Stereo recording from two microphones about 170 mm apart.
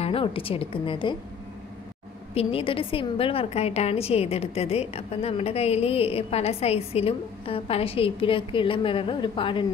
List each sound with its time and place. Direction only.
0.0 s a woman's voice: 30° left (ahead or behind)
2.3 s a woman's voice: 30° left (ahead or behind)